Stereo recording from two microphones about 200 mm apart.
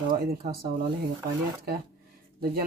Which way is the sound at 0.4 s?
50° right (ahead or behind).